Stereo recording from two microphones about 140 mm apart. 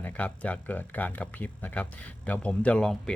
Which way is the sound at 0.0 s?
10° left (ahead or behind).